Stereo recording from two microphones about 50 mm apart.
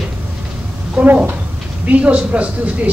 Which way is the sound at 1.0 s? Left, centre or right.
Right.